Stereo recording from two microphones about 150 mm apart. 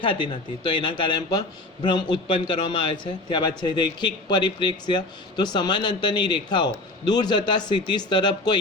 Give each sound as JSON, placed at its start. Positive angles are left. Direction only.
{"t": 0.0, "sound": "a man's voice", "side_deg": 35}